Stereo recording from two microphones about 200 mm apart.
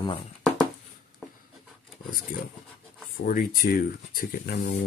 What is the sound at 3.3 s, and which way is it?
Speech, 45° left (ahead or behind).